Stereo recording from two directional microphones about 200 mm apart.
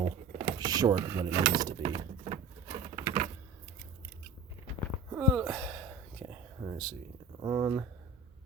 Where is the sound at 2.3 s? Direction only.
35° right (ahead or behind).